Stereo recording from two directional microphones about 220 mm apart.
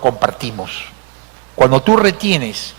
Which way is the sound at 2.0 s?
10° right (ahead or behind).